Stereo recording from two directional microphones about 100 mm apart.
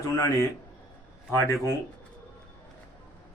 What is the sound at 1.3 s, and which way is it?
Speech, 30° left (ahead or behind).